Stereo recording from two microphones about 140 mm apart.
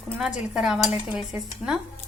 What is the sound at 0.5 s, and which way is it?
A woman's voice, 5° right (ahead or behind).